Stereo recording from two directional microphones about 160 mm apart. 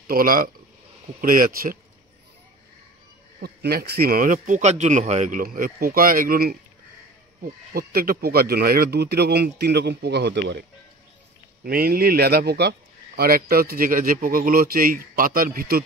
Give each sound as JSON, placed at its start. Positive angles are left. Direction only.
{"t": 0.0, "sound": "a man's voice", "side_deg": -60}
{"t": 3.3, "sound": "a man's voice", "side_deg": -85}
{"t": 11.6, "sound": "a man's voice", "side_deg": -70}